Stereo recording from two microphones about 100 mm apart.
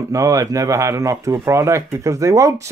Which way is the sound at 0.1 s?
35° right (ahead or behind).